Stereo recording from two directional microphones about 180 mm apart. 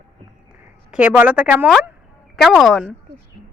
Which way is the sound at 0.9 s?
5° right (ahead or behind).